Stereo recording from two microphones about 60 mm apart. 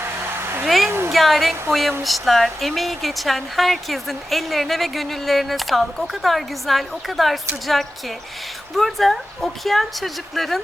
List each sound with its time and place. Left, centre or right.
0.2 s a sound: right
0.6 s a woman's voice: centre
0.9 s speech: right
1.1 s speech: centre